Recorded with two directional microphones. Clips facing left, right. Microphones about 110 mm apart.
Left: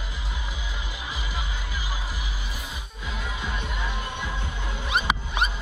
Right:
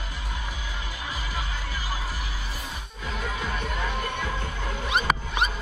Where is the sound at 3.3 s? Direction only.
45° right (ahead or behind).